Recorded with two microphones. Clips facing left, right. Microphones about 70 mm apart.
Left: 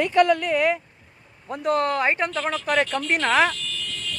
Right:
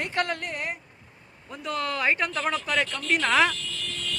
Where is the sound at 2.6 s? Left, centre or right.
Left.